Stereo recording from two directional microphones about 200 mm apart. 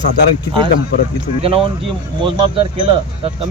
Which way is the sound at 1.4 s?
30° right (ahead or behind).